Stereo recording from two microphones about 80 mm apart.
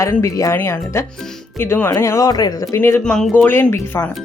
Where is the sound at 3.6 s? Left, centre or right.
Left.